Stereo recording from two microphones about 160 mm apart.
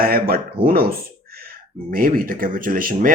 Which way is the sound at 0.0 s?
70° right (ahead or behind).